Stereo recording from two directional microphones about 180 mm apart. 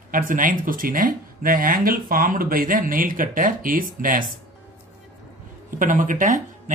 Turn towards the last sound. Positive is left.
turn(degrees=-45)  # may be behind; listen again after turning